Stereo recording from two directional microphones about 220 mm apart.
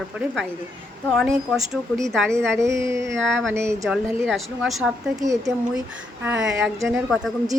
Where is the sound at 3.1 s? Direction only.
Centre (ahead or behind).